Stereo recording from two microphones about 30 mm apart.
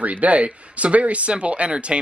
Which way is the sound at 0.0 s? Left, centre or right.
Right.